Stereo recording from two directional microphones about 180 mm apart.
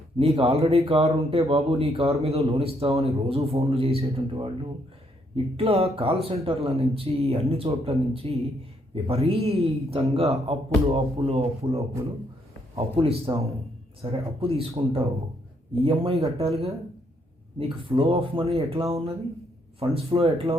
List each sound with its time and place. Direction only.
0.2 s speech: 30° right (ahead or behind)
5.5 s speech: 35° right (ahead or behind)
17.8 s speech: 30° right (ahead or behind)